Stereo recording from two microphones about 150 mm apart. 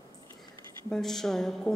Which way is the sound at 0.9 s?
5° left (ahead or behind).